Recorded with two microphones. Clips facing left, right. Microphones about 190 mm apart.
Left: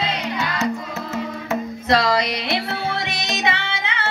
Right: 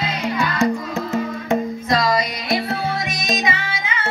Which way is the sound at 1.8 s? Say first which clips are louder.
Left 2 dB; 65° left (ahead or behind).